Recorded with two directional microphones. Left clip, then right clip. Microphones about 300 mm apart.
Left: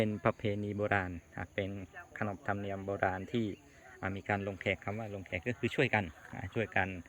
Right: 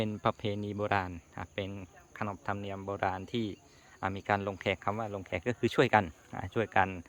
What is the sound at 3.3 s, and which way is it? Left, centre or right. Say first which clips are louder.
Speech: right 1 dB; right.